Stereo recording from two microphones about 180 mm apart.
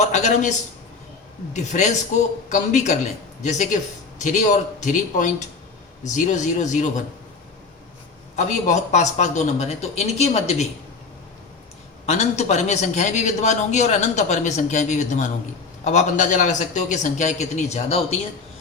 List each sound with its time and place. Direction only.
0.0 s a man's voice: 40° left (ahead or behind)
1.5 s a man's voice: 40° left (ahead or behind)
8.4 s a man's voice: 45° left (ahead or behind)
12.0 s a man's voice: 40° left (ahead or behind)